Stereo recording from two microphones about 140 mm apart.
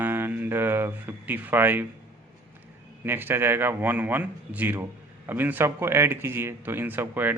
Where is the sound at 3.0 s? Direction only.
15° right (ahead or behind).